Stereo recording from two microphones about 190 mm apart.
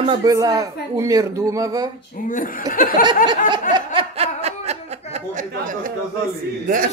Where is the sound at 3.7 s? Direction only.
30° right (ahead or behind).